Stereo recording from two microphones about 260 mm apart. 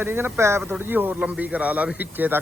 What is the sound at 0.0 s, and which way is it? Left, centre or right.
Speech, centre.